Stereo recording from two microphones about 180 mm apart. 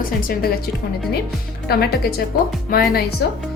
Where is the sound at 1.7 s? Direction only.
60° left (ahead or behind).